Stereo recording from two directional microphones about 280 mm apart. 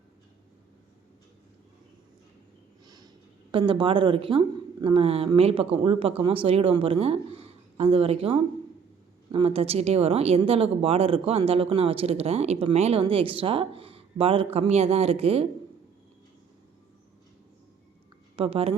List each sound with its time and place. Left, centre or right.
2.8 s a sound: centre
3.5 s speech: centre
18.3 s speech: centre